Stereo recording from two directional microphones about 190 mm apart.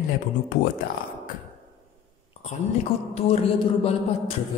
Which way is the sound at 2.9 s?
15° left (ahead or behind).